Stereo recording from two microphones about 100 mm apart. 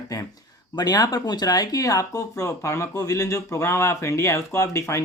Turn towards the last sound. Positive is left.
turn(degrees=30)  # may be behind; listen again after turning